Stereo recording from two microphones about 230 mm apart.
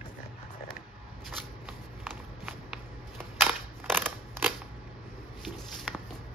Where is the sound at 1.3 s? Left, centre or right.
Centre.